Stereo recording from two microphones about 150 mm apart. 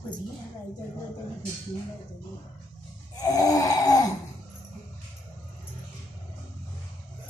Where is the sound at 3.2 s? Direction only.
25° left (ahead or behind).